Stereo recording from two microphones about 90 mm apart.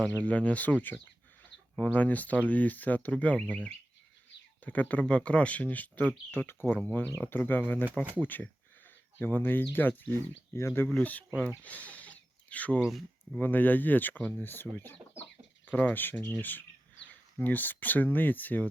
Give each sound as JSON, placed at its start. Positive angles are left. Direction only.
{"t": 0.2, "sound": "speech", "side_deg": 15}
{"t": 4.6, "sound": "speech", "side_deg": 15}
{"t": 10.8, "sound": "speech", "side_deg": 15}
{"t": 12.8, "sound": "speech", "side_deg": 0}
{"t": 13.4, "sound": "speech", "side_deg": 20}